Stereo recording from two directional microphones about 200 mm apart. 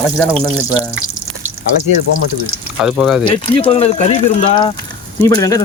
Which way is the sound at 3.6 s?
30° left (ahead or behind).